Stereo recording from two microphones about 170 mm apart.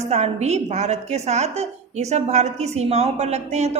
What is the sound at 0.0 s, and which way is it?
A woman's voice, 40° right (ahead or behind).